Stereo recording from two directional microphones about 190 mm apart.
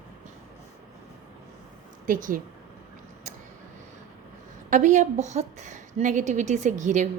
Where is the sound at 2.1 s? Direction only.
45° right (ahead or behind).